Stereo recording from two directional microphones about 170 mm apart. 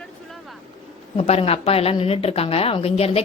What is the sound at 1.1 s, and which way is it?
A woman's voice, 35° left (ahead or behind).